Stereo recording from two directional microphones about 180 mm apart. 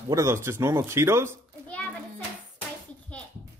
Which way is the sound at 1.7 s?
10° left (ahead or behind).